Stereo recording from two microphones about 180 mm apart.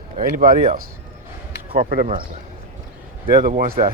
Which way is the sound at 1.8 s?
50° right (ahead or behind).